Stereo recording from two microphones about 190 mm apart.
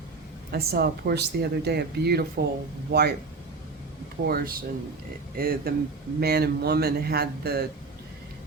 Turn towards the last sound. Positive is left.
turn(degrees=-55)  # may be behind; listen again after turning